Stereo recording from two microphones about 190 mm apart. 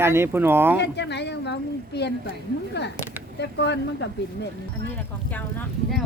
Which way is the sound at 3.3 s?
65° left (ahead or behind).